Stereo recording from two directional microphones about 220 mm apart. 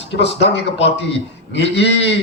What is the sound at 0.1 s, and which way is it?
Speech, 50° left (ahead or behind).